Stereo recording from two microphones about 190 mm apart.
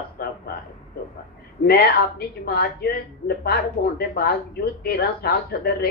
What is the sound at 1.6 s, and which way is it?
A woman's voice, 55° left (ahead or behind).